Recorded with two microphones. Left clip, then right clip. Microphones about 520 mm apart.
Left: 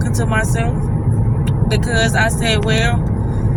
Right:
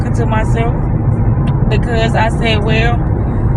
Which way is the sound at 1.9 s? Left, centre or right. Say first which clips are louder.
Right 1 dB; left.